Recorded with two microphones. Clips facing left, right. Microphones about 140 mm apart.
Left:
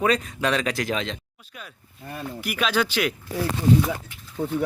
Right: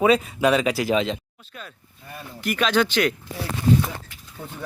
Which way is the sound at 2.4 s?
5° left (ahead or behind).